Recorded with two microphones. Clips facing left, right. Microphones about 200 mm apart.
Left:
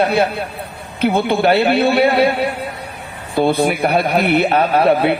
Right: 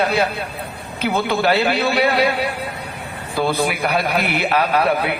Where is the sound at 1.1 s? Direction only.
25° left (ahead or behind).